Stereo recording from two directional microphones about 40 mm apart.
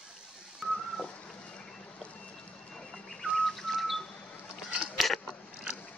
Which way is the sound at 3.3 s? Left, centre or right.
Centre.